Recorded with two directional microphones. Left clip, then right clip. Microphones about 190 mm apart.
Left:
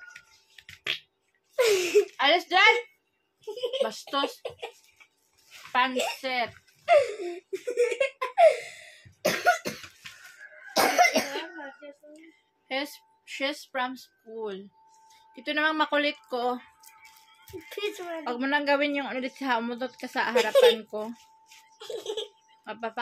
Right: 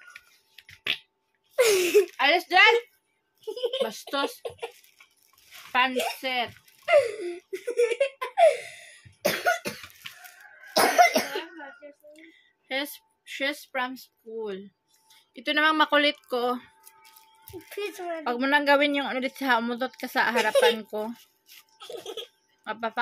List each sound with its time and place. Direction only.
1.5 s a sound: 30° right (ahead or behind)
2.1 s a woman's voice: 15° right (ahead or behind)
3.8 s a woman's voice: 15° right (ahead or behind)
5.7 s a woman's voice: 15° right (ahead or behind)
6.9 s laughter: 35° right (ahead or behind)
9.2 s cough: 25° right (ahead or behind)
10.7 s cough: 35° right (ahead or behind)
12.6 s a woman's voice: 15° right (ahead or behind)
15.0 s speech: 35° right (ahead or behind)
17.6 s a woman's voice: 5° right (ahead or behind)
18.2 s a woman's voice: 35° right (ahead or behind)
21.7 s giggle: 5° right (ahead or behind)
22.7 s a woman's voice: 35° right (ahead or behind)